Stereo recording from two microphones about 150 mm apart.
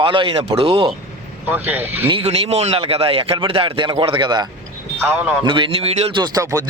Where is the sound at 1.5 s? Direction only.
10° right (ahead or behind).